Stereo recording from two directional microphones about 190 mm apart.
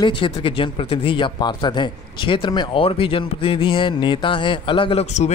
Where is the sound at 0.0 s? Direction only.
25° left (ahead or behind).